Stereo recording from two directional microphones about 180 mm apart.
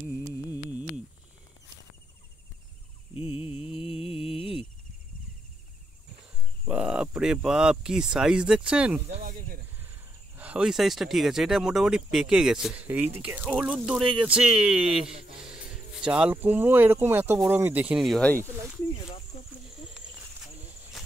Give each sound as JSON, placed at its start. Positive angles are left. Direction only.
{"t": 3.7, "sound": "mantra", "side_deg": -5}
{"t": 6.6, "sound": "speech", "side_deg": -5}
{"t": 9.0, "sound": "a sound", "side_deg": -40}
{"t": 10.3, "sound": "speech", "side_deg": -10}